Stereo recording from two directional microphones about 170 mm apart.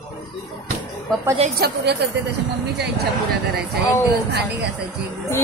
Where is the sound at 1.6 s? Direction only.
80° right.